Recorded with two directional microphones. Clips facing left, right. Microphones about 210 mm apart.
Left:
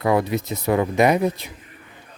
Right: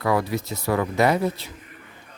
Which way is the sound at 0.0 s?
20° left (ahead or behind).